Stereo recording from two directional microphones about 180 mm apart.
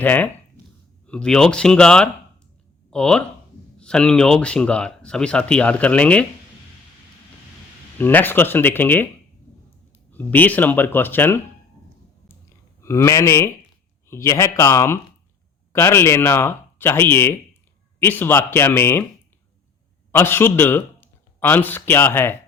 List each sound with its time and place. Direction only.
0.0 s speech: 10° left (ahead or behind)
7.9 s speech: 10° left (ahead or behind)
10.1 s speech: 10° left (ahead or behind)
12.3 s a sound: 15° left (ahead or behind)
14.1 s speech: 15° left (ahead or behind)
20.1 s a man's voice: 15° left (ahead or behind)